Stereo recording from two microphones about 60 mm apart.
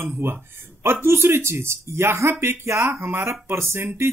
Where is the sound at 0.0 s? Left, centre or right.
Right.